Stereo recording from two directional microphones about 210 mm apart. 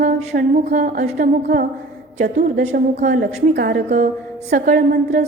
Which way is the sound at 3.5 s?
45° right (ahead or behind).